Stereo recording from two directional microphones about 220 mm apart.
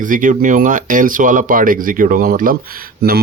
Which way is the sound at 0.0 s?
35° right (ahead or behind).